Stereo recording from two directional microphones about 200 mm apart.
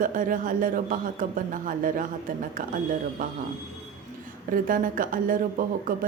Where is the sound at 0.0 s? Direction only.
40° right (ahead or behind).